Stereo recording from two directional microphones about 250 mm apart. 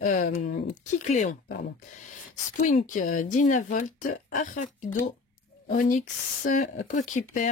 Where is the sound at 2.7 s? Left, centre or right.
Left.